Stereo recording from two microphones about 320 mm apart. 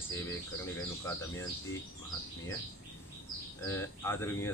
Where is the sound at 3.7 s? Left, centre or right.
Centre.